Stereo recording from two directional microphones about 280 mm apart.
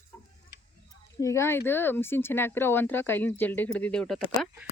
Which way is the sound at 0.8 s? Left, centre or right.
Centre.